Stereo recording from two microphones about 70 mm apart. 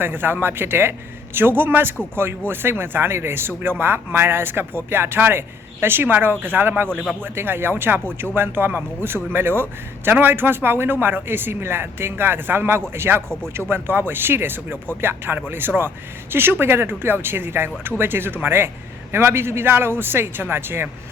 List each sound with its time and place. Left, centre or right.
0.0 s speech: right